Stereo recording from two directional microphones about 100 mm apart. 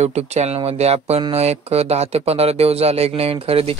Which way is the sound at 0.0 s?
90° right.